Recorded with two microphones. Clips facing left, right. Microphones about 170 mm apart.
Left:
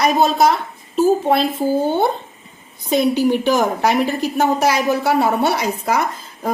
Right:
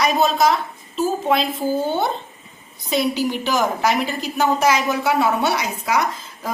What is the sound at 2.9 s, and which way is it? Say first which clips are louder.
A woman's voice: left 5 dB; 55° left (ahead or behind).